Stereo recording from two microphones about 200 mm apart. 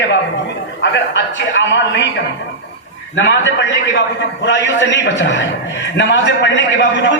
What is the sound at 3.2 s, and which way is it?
A man's voice, 65° left (ahead or behind).